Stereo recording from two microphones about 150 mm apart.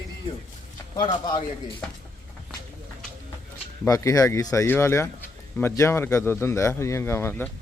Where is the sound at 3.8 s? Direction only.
20° left (ahead or behind).